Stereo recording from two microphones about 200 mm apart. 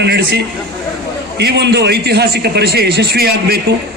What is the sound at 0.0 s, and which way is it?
A man's voice, 55° right (ahead or behind).